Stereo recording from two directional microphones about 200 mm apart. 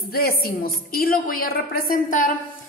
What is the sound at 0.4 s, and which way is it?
A woman's voice, 50° left (ahead or behind).